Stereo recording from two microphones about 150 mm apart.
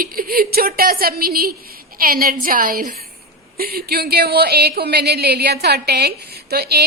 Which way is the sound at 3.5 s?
85° right.